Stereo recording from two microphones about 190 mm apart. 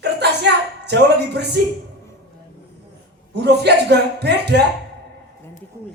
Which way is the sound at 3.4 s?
60° right (ahead or behind).